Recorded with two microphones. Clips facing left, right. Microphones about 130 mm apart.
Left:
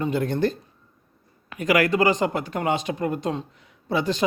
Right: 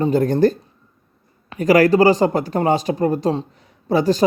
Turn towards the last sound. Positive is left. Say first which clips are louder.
# right 7 dB
turn(degrees=-40)  # may be behind; listen again after turning